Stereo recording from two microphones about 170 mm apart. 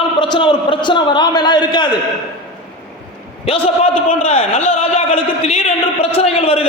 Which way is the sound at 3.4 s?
35° left (ahead or behind).